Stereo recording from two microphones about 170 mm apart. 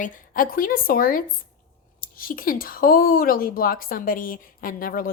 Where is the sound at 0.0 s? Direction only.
50° left (ahead or behind).